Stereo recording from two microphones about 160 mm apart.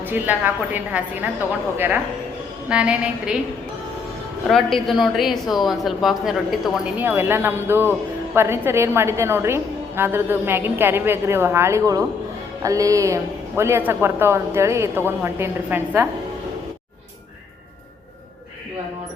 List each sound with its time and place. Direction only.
0.0 s a woman's voice: 10° right (ahead or behind)
2.6 s a woman's voice: 5° right (ahead or behind)
4.4 s a woman's voice: centre (ahead or behind)